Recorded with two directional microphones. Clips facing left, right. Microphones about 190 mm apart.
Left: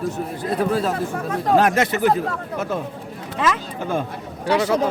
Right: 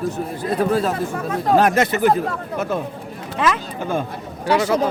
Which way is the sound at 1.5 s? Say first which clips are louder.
Right 1 dB; 40° right (ahead or behind).